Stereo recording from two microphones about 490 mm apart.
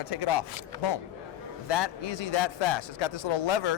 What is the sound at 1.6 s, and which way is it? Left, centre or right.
A man's voice, left.